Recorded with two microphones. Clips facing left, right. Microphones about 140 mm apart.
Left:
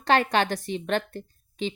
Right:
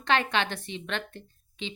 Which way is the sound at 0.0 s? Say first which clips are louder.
Left 4 dB; 40° left (ahead or behind).